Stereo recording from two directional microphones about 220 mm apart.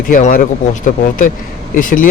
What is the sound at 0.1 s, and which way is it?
A man's voice, 40° left (ahead or behind).